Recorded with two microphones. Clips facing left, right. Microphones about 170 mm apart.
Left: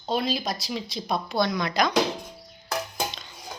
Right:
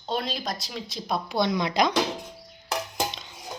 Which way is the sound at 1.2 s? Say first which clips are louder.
Right 1 dB; 20° right (ahead or behind).